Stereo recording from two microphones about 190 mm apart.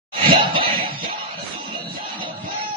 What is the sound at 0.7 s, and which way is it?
Music, 50° right (ahead or behind).